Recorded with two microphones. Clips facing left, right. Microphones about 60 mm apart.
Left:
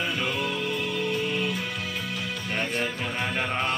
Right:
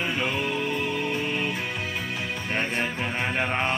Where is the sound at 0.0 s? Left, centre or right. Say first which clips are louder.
Right 1 dB; right.